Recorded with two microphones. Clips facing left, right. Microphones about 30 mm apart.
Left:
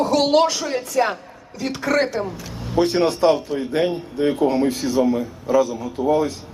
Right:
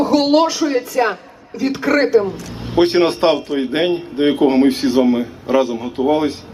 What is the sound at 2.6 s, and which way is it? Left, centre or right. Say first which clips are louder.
A man's voice: right 5 dB; right.